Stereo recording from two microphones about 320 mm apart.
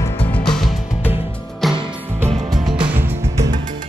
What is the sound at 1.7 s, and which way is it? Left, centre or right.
Music, centre.